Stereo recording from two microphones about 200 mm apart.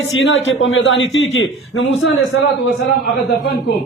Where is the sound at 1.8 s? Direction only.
85° left.